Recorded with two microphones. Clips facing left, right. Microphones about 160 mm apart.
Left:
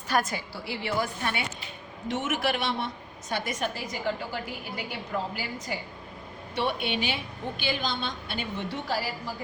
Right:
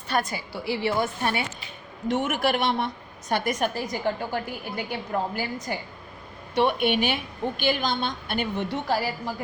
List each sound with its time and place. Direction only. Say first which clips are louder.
0.1 s a woman's voice: even; centre (ahead or behind)
0.6 s a woman's voice: right 5 dB; 30° right (ahead or behind)
2.0 s a woman's voice: right 4 dB; 55° right (ahead or behind)